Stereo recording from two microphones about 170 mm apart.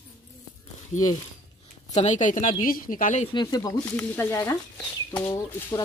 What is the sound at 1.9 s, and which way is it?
Speech, 45° left (ahead or behind).